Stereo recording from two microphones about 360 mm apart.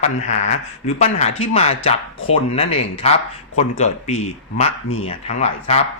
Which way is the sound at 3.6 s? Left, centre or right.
Centre.